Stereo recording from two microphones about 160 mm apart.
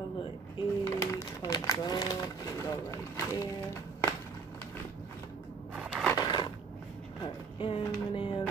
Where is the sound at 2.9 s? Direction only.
15° left (ahead or behind).